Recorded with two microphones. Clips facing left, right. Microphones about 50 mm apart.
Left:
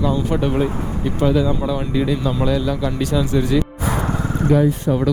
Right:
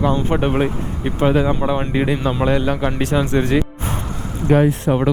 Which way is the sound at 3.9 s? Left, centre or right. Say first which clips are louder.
Left 5 dB; left.